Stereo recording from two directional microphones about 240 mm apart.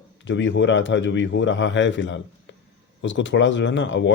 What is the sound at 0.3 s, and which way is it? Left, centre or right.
Speech, left.